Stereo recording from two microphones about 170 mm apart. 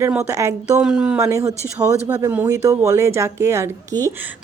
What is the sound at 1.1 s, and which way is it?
Speech, 20° right (ahead or behind).